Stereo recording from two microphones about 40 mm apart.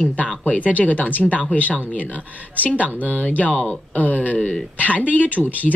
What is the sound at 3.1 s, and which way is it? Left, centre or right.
Speech, left.